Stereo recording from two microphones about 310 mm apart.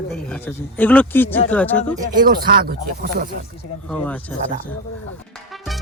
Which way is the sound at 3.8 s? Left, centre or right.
Centre.